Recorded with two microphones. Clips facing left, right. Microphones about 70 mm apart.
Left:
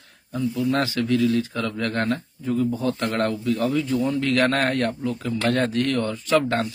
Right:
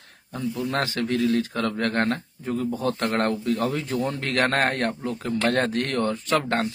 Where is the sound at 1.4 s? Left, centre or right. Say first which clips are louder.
Right 1 dB; right.